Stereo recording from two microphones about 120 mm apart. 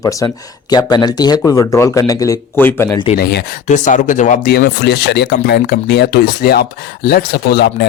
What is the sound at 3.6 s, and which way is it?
Speech, 90° left.